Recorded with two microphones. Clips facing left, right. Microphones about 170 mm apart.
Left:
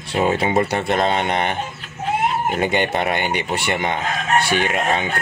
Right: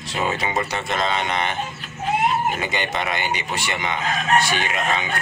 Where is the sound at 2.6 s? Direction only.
55° left (ahead or behind).